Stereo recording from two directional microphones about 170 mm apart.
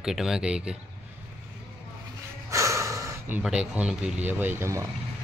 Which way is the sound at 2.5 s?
15° right (ahead or behind).